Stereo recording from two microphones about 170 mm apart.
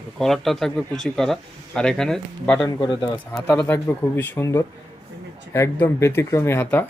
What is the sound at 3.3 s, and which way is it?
Speech, 5° left (ahead or behind).